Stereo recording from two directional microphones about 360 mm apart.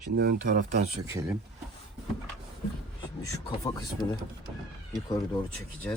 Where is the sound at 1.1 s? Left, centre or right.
Centre.